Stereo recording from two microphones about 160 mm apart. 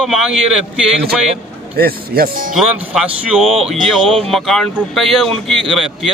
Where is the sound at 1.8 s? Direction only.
70° right (ahead or behind).